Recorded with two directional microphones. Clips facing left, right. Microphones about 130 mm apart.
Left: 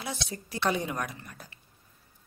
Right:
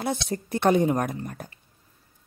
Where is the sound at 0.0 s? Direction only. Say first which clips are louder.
Right 9 dB; 50° right (ahead or behind).